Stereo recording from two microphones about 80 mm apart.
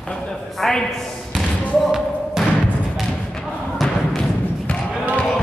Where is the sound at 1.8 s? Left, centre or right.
Centre.